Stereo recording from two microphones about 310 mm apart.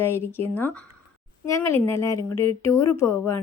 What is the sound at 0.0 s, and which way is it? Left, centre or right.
Speech, centre.